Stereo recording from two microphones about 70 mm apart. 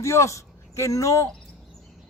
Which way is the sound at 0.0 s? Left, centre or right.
Left.